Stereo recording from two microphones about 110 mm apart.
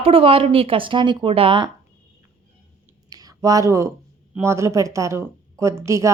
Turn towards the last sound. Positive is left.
turn(degrees=-25)  # may be behind; listen again after turning